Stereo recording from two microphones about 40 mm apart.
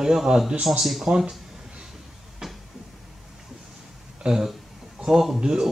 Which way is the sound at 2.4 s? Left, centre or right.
Centre.